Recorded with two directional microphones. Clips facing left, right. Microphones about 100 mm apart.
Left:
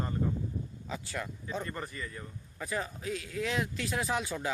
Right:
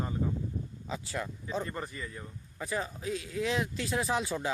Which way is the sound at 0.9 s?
20° right (ahead or behind).